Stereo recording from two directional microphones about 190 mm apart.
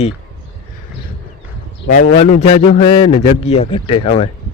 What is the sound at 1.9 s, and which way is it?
A man's voice, 40° left (ahead or behind).